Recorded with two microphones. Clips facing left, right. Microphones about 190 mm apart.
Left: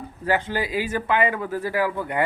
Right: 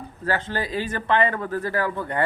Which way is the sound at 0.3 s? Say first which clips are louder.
Left 2 dB; 15° left (ahead or behind).